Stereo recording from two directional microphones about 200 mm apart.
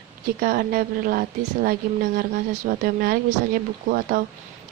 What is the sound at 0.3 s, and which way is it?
Speech, 45° right (ahead or behind).